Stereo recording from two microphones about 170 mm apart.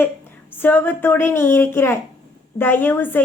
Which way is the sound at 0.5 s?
10° left (ahead or behind).